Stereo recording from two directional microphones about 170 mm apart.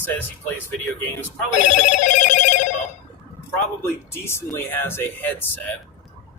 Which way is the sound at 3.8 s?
15° left (ahead or behind).